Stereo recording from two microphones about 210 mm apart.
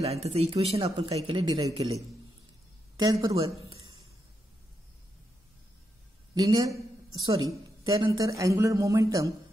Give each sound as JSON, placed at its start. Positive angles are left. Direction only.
{"t": 0.0, "sound": "speech", "side_deg": -30}
{"t": 3.0, "sound": "speech", "side_deg": -15}
{"t": 6.3, "sound": "speech", "side_deg": -20}
{"t": 7.8, "sound": "speech", "side_deg": -15}